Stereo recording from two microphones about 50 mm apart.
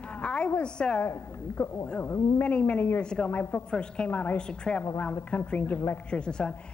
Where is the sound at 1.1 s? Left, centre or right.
Left.